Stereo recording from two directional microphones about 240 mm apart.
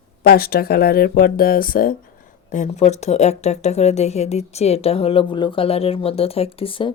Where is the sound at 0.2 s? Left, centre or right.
Left.